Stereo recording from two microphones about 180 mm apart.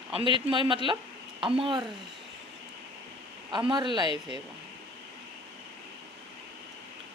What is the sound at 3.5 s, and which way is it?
Speech, 25° right (ahead or behind).